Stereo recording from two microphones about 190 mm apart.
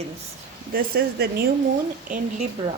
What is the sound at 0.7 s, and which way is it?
Speech, 55° right (ahead or behind).